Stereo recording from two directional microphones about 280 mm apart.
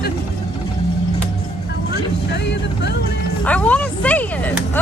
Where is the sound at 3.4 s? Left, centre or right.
Centre.